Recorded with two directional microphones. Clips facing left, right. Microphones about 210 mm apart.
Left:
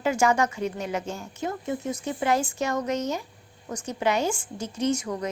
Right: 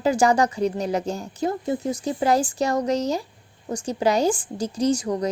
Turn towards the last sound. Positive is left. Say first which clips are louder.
# right 4 dB
turn(degrees=-35)  # may be behind; listen again after turning